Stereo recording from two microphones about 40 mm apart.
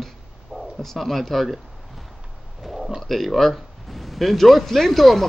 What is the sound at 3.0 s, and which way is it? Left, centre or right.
Speech, centre.